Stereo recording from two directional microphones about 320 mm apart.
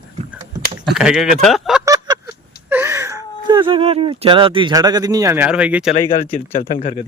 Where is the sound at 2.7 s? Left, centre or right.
Centre.